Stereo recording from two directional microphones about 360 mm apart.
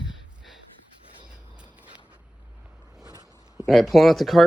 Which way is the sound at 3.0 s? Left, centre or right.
Centre.